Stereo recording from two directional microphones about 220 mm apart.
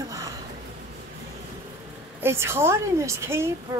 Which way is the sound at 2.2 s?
10° right (ahead or behind).